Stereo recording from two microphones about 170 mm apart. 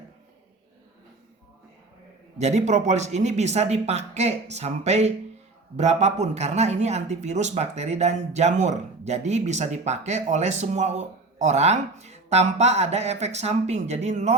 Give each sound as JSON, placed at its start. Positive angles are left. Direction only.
{"t": 2.4, "sound": "speech", "side_deg": -40}